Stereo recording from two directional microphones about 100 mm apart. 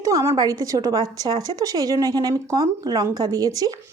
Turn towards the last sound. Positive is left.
turn(degrees=-40)  # may be behind; listen again after turning